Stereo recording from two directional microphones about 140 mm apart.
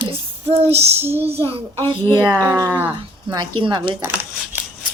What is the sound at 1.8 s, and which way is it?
Speech, 35° right (ahead or behind).